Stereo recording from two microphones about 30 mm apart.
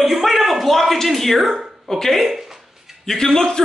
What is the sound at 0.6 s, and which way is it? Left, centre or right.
Speech, centre.